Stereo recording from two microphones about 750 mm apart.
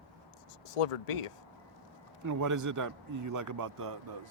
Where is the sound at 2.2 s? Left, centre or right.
Right.